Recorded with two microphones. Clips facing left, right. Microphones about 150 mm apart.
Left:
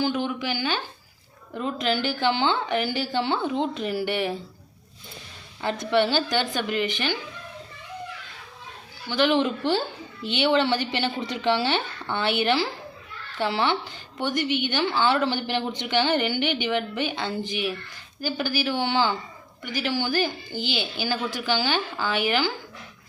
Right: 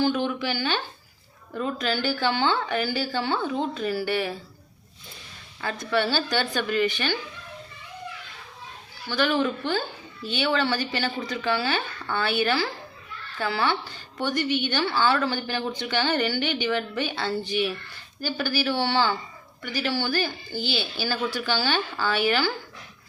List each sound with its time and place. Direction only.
0.0 s speech: 10° left (ahead or behind)
5.8 s speech: 20° left (ahead or behind)
9.0 s speech: 20° left (ahead or behind)